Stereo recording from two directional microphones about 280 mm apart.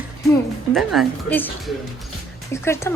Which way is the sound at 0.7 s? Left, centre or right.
Centre.